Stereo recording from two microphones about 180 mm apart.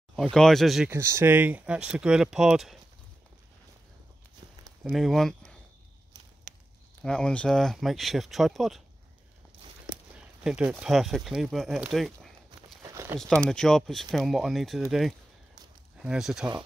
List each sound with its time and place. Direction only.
0.1 s speech: centre (ahead or behind)
0.9 s speech: 15° right (ahead or behind)
4.8 s speech: centre (ahead or behind)
6.5 s a sound: 40° right (ahead or behind)
7.0 s speech: 5° left (ahead or behind)
10.1 s speech: 5° right (ahead or behind)
12.8 s crumpling: 15° right (ahead or behind)
13.5 s speech: centre (ahead or behind)